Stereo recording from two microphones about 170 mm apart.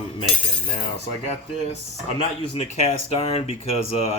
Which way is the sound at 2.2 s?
40° left (ahead or behind).